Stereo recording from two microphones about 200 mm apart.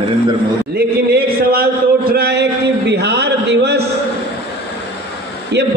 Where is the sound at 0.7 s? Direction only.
50° right (ahead or behind).